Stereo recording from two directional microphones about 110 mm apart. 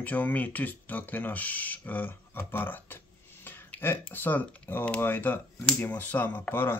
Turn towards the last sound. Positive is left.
turn(degrees=15)  # may be behind; listen again after turning